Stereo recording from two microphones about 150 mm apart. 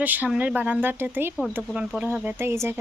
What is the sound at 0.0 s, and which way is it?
Speech, 10° right (ahead or behind).